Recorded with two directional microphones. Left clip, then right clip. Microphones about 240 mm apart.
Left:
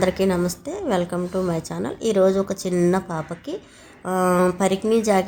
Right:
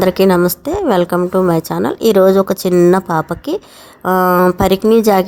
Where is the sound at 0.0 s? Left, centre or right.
Right.